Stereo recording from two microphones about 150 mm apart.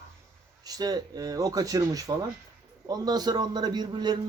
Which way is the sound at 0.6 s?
25° right (ahead or behind).